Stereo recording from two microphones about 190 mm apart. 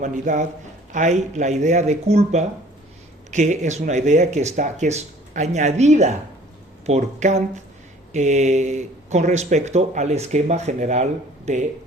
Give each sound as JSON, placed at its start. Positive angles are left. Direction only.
{"t": 0.0, "sound": "a man's voice", "side_deg": -40}